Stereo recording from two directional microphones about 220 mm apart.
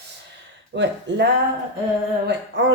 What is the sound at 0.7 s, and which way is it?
Speech, 55° right (ahead or behind).